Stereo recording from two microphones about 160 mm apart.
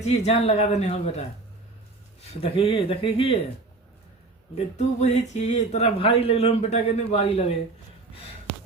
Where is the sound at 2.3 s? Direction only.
35° left (ahead or behind).